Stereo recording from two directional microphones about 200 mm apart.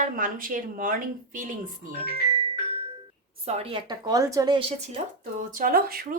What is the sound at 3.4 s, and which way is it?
A woman's voice, 30° right (ahead or behind).